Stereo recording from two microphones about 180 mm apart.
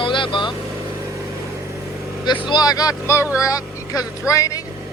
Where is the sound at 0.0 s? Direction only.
25° left (ahead or behind).